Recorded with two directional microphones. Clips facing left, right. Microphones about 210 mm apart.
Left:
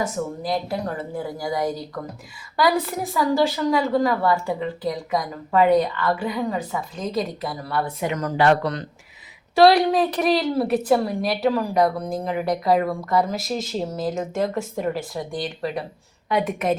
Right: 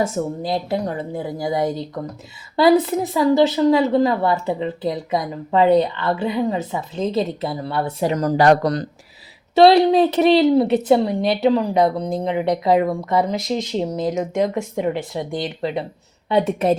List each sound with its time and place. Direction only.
0.0 s a woman's voice: 25° right (ahead or behind)
9.6 s a woman's voice: 25° right (ahead or behind)